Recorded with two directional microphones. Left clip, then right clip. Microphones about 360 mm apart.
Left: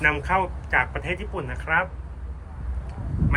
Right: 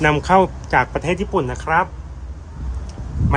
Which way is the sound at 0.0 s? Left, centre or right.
Centre.